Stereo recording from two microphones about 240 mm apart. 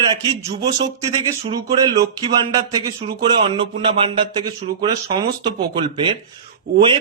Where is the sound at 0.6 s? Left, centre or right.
Centre.